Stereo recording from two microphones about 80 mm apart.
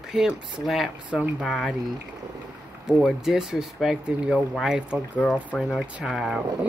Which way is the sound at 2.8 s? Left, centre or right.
Centre.